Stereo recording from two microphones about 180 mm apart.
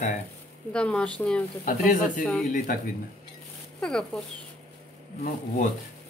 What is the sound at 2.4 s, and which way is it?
Speech, 50° left (ahead or behind).